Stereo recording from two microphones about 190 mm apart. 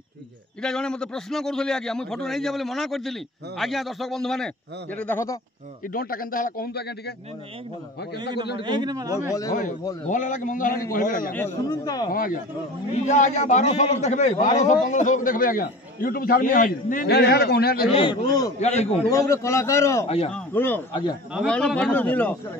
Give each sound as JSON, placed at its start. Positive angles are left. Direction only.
{"t": 0.6, "sound": "a man's voice", "side_deg": 5}
{"t": 5.9, "sound": "a man's voice", "side_deg": 50}
{"t": 8.5, "sound": "a man's voice", "side_deg": -25}
{"t": 9.5, "sound": "a man's voice", "side_deg": 40}
{"t": 11.3, "sound": "speech", "side_deg": 15}
{"t": 12.1, "sound": "a man's voice", "side_deg": 50}
{"t": 17.9, "sound": "speech", "side_deg": 25}
{"t": 18.6, "sound": "a man's voice", "side_deg": 35}
{"t": 19.1, "sound": "a man's voice", "side_deg": 15}
{"t": 20.1, "sound": "a man's voice", "side_deg": 30}
{"t": 20.3, "sound": "a man's voice", "side_deg": 10}